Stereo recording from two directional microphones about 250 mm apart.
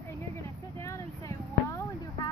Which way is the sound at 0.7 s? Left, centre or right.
Centre.